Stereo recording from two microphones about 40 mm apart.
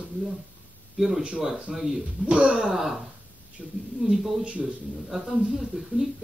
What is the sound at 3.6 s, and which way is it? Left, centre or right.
Speech, right.